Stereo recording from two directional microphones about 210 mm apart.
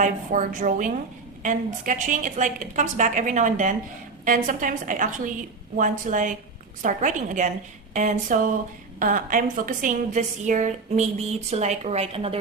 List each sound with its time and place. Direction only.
0.0 s a woman's voice: 35° right (ahead or behind)